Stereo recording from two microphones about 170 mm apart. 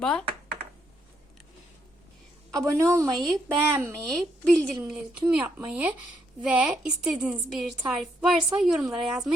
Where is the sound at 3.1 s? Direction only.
Centre (ahead or behind).